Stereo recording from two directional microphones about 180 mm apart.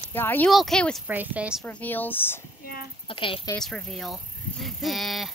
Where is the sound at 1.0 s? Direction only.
10° right (ahead or behind).